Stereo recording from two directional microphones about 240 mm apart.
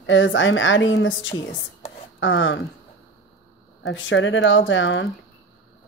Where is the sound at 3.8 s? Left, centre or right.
Left.